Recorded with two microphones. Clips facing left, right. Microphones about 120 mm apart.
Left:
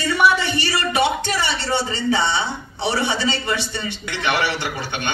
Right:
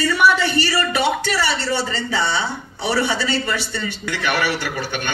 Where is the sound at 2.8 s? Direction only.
20° left (ahead or behind).